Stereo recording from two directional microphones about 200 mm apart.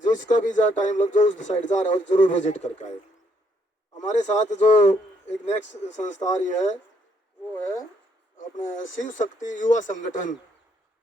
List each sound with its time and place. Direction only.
0.0 s a man's voice: 40° left (ahead or behind)
3.9 s a man's voice: 35° left (ahead or behind)
8.4 s a man's voice: 40° left (ahead or behind)